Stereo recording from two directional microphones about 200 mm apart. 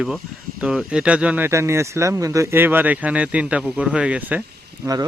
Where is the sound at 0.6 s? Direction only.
5° right (ahead or behind).